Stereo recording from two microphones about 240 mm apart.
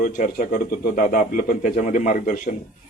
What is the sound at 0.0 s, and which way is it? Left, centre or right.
A man's voice, left.